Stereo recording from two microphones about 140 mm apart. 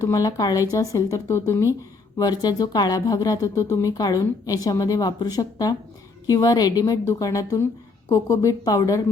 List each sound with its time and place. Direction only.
0.0 s speech: 25° left (ahead or behind)